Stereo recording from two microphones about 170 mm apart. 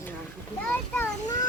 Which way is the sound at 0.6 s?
15° left (ahead or behind).